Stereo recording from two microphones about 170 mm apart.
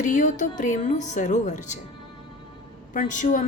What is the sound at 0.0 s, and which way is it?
A woman's voice, 45° left (ahead or behind).